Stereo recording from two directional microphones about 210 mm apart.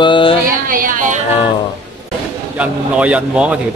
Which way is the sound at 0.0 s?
25° left (ahead or behind).